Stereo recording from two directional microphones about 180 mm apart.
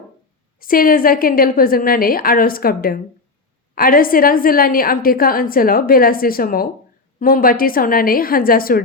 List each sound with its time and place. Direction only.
0.6 s a woman's voice: 50° left (ahead or behind)